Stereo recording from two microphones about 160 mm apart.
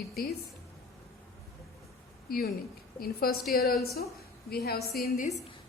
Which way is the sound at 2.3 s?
70° left (ahead or behind).